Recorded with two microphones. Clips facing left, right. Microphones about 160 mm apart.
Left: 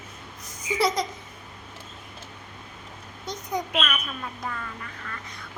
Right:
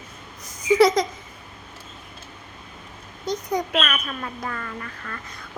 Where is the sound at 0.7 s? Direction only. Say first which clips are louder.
Right 8 dB; 90° right.